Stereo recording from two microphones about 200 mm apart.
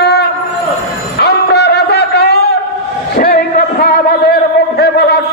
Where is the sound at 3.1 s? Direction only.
45° left (ahead or behind).